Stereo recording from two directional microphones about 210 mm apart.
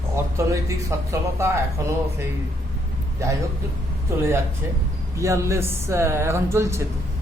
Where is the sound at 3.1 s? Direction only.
15° right (ahead or behind).